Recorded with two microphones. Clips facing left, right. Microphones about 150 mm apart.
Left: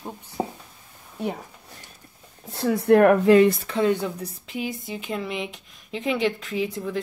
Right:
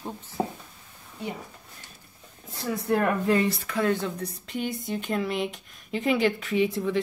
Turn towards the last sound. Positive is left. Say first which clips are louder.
# right 3 dB
turn(degrees=0)  # may be behind; listen again after turning